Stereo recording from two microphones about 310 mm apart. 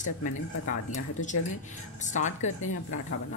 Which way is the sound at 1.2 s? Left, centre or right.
Left.